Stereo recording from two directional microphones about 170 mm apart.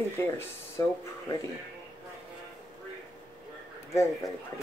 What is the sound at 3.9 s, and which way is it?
Speech, 20° left (ahead or behind).